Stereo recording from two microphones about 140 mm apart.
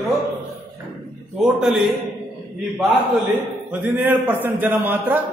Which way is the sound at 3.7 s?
10° right (ahead or behind).